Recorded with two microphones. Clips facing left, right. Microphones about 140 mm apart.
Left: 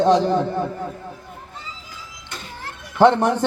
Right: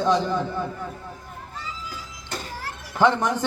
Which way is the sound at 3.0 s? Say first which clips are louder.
Left 5 dB; 65° left (ahead or behind).